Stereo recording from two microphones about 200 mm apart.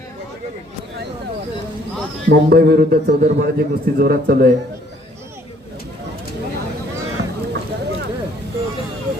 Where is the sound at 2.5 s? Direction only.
50° right (ahead or behind).